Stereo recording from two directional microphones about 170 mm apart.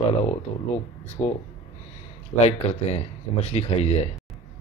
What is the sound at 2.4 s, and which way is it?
Speech, 40° left (ahead or behind).